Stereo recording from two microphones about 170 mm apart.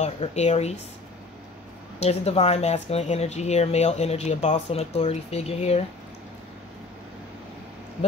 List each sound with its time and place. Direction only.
0.0 s speech: 40° left (ahead or behind)
2.0 s speech: 40° left (ahead or behind)